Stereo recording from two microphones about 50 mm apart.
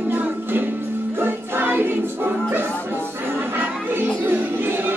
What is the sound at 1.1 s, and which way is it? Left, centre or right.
Music, right.